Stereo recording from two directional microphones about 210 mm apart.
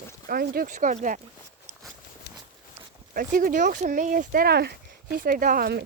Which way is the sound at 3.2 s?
40° right (ahead or behind).